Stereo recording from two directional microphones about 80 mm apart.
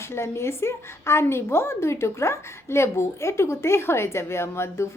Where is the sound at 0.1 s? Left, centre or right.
Left.